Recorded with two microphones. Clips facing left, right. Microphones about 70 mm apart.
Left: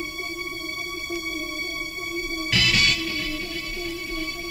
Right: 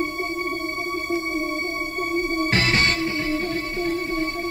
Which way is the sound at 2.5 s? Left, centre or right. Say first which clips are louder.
Even; right.